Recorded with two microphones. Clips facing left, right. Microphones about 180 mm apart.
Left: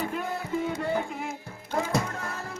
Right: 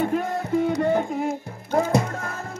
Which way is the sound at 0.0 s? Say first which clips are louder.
Right 8 dB; 45° right (ahead or behind).